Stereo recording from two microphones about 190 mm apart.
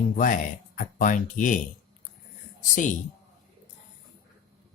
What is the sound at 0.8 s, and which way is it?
Speech, 45° left (ahead or behind).